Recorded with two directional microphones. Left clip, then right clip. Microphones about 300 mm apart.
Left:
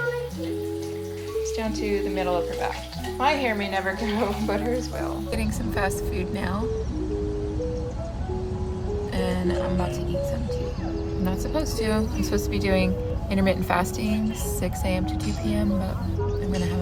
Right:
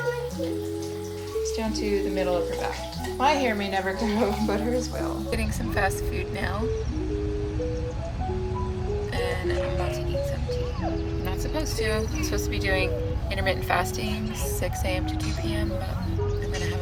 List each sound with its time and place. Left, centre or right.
1.5 s speech: centre
5.3 s a woman's voice: centre
9.1 s music: centre
11.3 s a woman's voice: centre